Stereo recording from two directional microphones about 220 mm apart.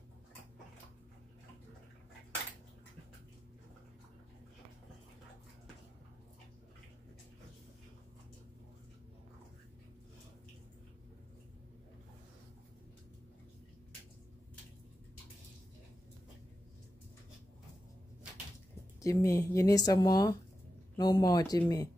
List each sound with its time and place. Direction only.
18.9 s speech: 15° left (ahead or behind)